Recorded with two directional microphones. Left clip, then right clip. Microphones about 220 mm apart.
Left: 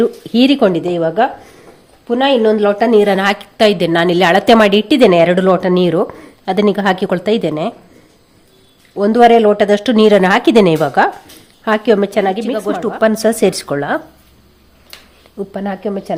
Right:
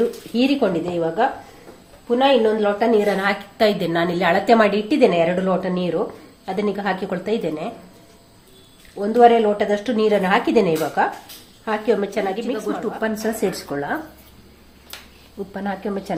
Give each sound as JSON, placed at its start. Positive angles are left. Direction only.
{"t": 0.3, "sound": "a woman's voice", "side_deg": 50}
{"t": 9.0, "sound": "a woman's voice", "side_deg": 50}
{"t": 15.5, "sound": "speech", "side_deg": 40}